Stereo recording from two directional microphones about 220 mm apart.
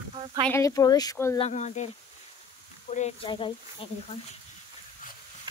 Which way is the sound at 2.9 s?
30° left (ahead or behind).